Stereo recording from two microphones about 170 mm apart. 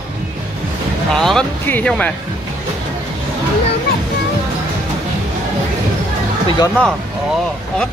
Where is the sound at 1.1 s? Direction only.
Centre (ahead or behind).